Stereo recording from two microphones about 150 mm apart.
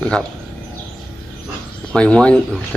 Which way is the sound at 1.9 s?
5° left (ahead or behind).